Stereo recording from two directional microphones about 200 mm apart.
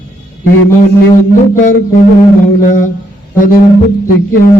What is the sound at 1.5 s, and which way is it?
Music, 45° left (ahead or behind).